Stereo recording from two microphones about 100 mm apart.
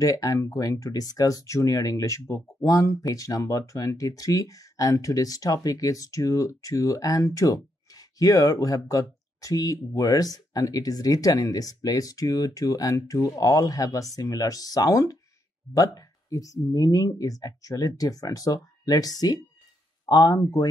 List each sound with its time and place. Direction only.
0.0 s speech: 35° left (ahead or behind)